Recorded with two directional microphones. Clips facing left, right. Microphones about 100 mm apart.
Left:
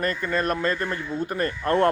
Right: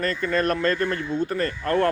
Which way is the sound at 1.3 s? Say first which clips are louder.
Left 3 dB; 20° left (ahead or behind).